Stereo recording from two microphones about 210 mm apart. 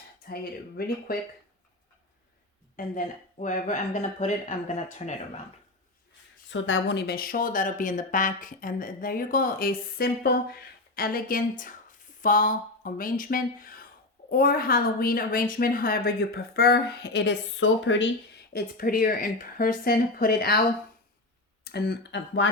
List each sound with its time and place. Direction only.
0.8 s a woman's voice: 45° left (ahead or behind)
2.7 s speech: 40° left (ahead or behind)
6.5 s a woman's voice: 65° left (ahead or behind)
18.5 s a woman's voice: 45° left (ahead or behind)
21.6 s a woman's voice: 50° left (ahead or behind)